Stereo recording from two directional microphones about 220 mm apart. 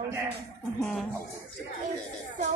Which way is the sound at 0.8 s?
5° left (ahead or behind).